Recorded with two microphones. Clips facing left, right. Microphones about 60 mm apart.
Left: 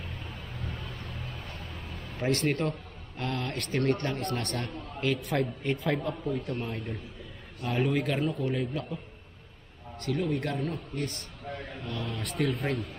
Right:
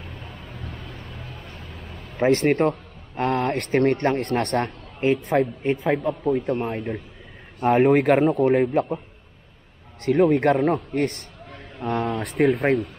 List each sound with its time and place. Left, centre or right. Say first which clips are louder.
0.6 s vehicle: right 1 dB; right
0.8 s vehicle: right 2 dB; centre
2.1 s a man's voice: right 10 dB; right
5.6 s a woman's voice: right 7 dB; right
6.2 s a man's voice: right 10 dB; right
7.6 s a man's voice: right 12 dB; right
10.0 s a man's voice: right 13 dB; right